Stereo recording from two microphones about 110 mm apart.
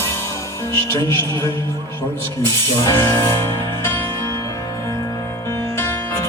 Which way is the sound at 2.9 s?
25° left (ahead or behind).